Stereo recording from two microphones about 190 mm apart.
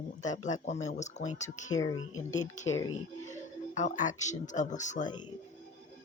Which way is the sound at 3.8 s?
40° left (ahead or behind).